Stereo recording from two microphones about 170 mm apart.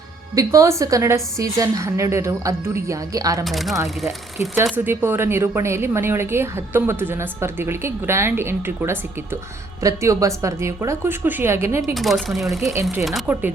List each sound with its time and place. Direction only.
0.3 s a woman's voice: 20° right (ahead or behind)
3.4 s speech: centre (ahead or behind)
4.5 s speech: 10° right (ahead or behind)
11.9 s speech: centre (ahead or behind)